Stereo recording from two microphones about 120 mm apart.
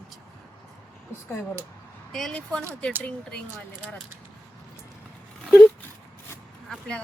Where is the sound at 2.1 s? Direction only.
5° left (ahead or behind).